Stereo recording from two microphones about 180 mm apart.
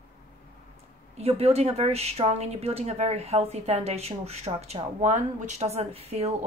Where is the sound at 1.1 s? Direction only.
35° right (ahead or behind).